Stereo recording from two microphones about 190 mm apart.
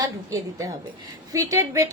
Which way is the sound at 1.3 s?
15° right (ahead or behind).